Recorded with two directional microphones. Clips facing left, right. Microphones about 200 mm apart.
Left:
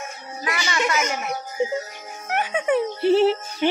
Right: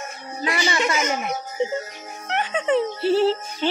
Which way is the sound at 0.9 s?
Centre (ahead or behind).